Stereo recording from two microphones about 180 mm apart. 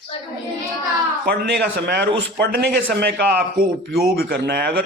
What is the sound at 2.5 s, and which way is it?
Speech, 60° right (ahead or behind).